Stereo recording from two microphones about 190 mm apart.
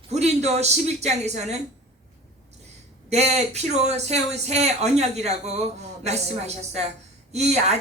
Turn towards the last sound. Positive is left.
turn(degrees=-35)  # may be behind; listen again after turning